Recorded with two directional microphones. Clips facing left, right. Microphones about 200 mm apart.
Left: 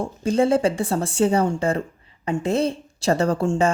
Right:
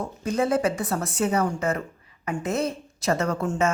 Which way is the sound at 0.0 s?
30° left (ahead or behind).